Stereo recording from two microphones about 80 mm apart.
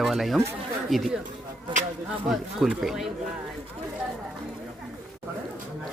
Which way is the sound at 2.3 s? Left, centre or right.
Centre.